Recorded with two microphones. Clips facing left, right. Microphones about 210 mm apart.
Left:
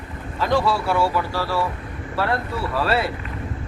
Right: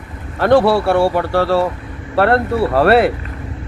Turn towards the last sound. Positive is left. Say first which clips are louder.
# right 10 dB
turn(degrees=-65)  # may be behind; listen again after turning